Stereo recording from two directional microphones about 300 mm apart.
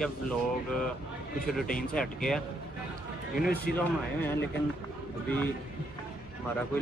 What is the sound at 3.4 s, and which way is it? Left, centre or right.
Speech, left.